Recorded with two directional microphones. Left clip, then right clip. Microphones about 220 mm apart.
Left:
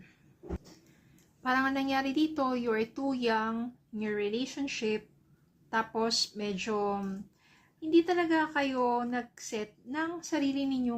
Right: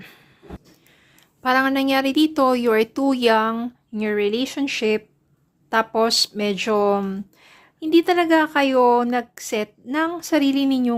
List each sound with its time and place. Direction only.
1.4 s speech: 40° right (ahead or behind)